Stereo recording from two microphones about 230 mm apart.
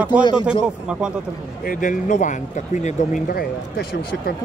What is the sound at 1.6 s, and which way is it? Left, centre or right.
Speech, left.